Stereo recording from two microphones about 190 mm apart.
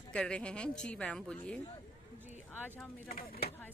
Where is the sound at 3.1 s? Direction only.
55° left (ahead or behind).